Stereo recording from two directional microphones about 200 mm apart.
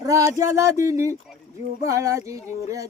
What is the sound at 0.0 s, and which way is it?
Speech, 15° right (ahead or behind).